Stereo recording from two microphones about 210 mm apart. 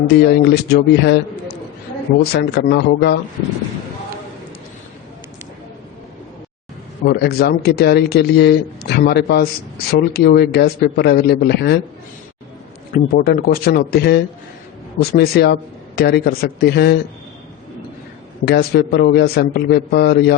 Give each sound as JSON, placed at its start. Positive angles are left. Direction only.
{"t": 0.2, "sound": "a man's voice", "side_deg": 50}
{"t": 2.3, "sound": "a man's voice", "side_deg": 55}
{"t": 7.0, "sound": "a man's voice", "side_deg": 50}
{"t": 12.9, "sound": "a man's voice", "side_deg": 45}
{"t": 18.4, "sound": "a man's voice", "side_deg": 50}